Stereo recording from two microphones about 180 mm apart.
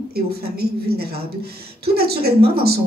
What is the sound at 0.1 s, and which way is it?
A woman's voice, 60° right (ahead or behind).